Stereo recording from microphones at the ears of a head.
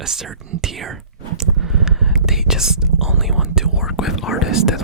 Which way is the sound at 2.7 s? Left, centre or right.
Right.